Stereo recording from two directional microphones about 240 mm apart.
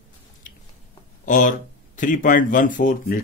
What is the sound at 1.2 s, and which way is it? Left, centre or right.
Speech, left.